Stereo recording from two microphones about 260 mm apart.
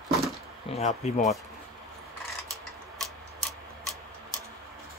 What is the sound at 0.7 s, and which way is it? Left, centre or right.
Speech, left.